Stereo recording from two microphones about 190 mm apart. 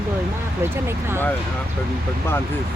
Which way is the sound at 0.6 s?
10° right (ahead or behind).